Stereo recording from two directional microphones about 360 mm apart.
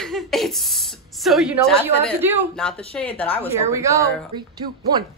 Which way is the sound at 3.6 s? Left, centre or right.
Centre.